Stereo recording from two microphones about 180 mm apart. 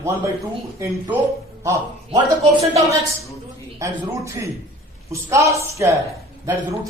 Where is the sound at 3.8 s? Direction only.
15° right (ahead or behind).